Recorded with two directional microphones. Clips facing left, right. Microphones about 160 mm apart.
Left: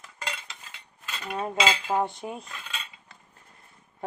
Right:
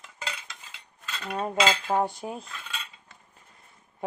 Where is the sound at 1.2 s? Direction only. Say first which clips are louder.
Right 1 dB; centre (ahead or behind).